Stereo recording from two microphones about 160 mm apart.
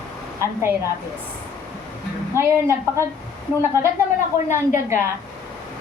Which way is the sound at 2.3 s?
15° right (ahead or behind).